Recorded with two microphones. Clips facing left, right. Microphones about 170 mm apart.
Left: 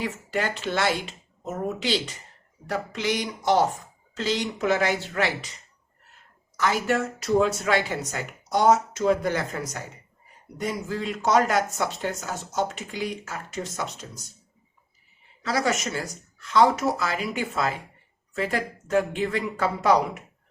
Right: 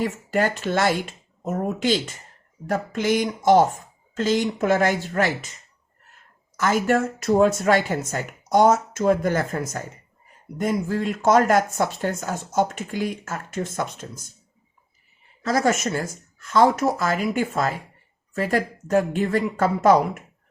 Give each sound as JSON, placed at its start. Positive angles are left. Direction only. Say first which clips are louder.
{"t": 0.0, "sound": "speech", "louder": "right 5 dB", "side_deg": -45}
{"t": 6.6, "sound": "speech", "louder": "right 4 dB", "side_deg": -45}
{"t": 15.4, "sound": "speech", "louder": "right 4 dB", "side_deg": -45}